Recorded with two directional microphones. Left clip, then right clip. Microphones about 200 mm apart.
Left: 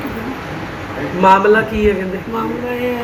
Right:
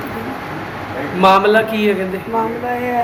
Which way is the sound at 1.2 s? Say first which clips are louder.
Left 1 dB; 70° right (ahead or behind).